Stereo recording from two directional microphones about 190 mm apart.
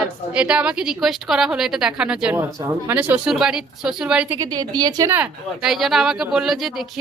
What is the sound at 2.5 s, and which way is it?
Speech, 15° right (ahead or behind).